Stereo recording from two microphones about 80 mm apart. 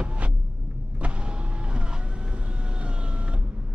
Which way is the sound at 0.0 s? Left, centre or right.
Centre.